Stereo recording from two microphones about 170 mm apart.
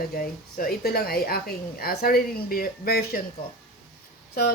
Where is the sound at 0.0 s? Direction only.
60° left (ahead or behind).